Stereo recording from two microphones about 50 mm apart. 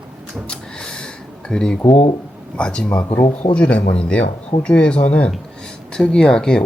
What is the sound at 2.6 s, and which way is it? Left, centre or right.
A man's voice, centre.